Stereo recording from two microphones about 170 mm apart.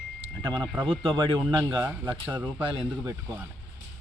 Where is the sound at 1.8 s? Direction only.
10° right (ahead or behind).